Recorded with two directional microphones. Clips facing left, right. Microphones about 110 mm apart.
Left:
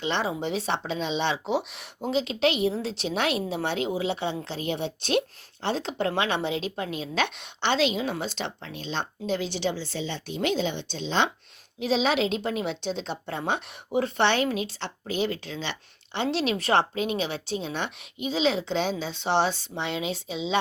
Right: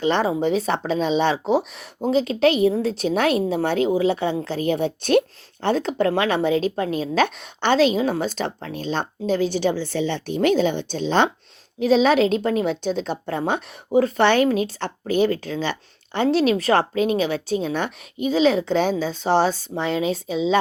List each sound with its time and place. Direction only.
0.0 s a woman's voice: 45° right (ahead or behind)